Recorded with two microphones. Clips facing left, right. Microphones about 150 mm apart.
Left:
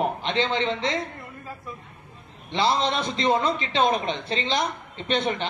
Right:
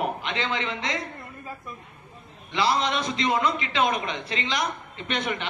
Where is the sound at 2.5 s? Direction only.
25° left (ahead or behind).